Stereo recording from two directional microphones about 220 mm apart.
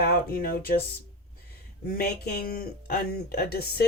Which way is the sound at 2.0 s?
45° left (ahead or behind).